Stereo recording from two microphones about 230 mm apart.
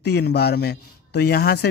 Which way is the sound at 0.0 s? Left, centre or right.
Left.